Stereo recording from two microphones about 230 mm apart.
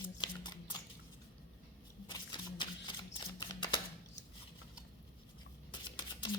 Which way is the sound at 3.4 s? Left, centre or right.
Left.